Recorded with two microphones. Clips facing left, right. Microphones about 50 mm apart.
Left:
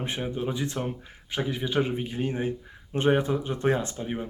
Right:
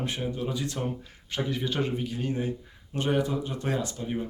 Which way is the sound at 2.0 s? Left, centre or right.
Left.